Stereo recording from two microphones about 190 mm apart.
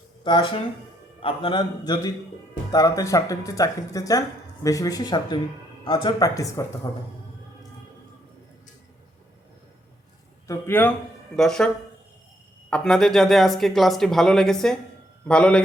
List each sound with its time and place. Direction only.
0.3 s a man's voice: 25° left (ahead or behind)
10.4 s speech: 15° left (ahead or behind)
12.7 s speech: 5° left (ahead or behind)